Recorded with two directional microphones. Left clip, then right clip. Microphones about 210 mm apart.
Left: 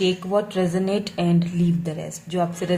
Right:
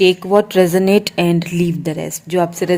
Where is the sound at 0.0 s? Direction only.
40° right (ahead or behind).